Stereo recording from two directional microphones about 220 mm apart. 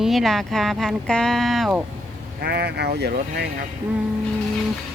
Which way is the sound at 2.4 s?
45° right (ahead or behind).